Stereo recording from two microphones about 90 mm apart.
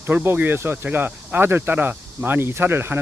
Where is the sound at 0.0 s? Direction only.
25° right (ahead or behind).